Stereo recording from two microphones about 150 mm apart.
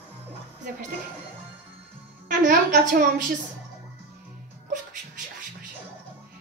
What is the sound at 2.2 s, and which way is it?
Music, 60° right (ahead or behind).